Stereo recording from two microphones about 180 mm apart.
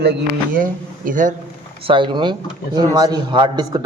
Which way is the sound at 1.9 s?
25° right (ahead or behind).